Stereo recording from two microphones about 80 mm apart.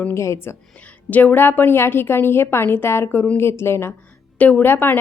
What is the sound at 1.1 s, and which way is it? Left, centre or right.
Speech, left.